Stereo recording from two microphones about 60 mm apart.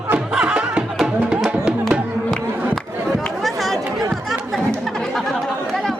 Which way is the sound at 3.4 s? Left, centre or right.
Centre.